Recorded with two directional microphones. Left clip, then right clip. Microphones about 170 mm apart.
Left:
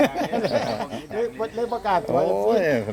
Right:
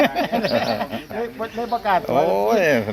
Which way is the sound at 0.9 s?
90° left.